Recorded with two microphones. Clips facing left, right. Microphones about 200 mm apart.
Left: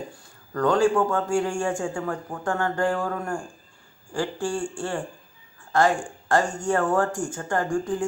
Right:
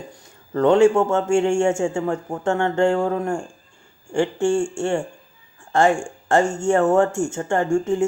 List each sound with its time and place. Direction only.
0.5 s a man's voice: 25° right (ahead or behind)